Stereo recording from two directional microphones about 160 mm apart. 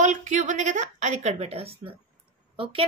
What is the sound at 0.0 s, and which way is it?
A woman's voice, 50° right (ahead or behind).